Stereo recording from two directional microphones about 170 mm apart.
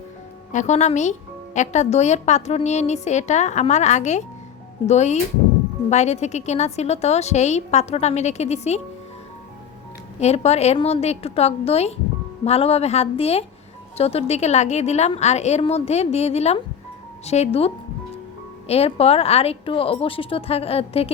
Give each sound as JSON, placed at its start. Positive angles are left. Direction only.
{"t": 0.5, "sound": "a woman's voice", "side_deg": 45}
{"t": 10.2, "sound": "a woman's voice", "side_deg": 40}
{"t": 18.7, "sound": "a woman's voice", "side_deg": 35}